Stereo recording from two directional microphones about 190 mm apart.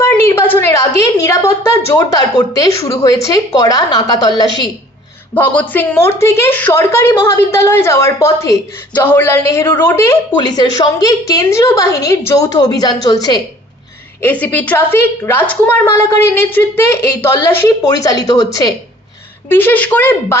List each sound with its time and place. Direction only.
0.0 s a woman's voice: 15° left (ahead or behind)
5.3 s a woman's voice: 10° left (ahead or behind)
14.2 s a woman's voice: 10° left (ahead or behind)